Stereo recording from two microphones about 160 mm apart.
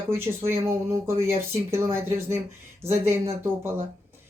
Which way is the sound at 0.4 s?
15° right (ahead or behind).